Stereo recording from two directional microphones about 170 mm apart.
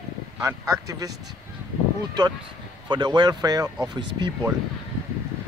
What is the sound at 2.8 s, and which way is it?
Speech, 25° right (ahead or behind).